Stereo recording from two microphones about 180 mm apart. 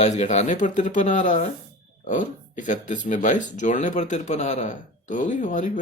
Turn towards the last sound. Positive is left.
turn(degrees=45)  # may be behind; listen again after turning